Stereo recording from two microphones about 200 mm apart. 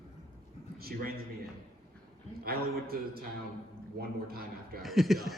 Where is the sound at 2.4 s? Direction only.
50° right (ahead or behind).